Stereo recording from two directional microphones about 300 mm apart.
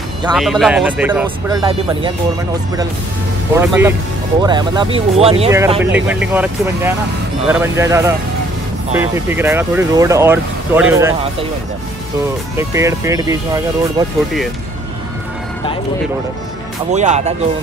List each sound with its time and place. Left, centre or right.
0.4 s speech: centre
3.5 s speech: centre
5.5 s speech: centre
12.5 s speech: centre
16.9 s speech: right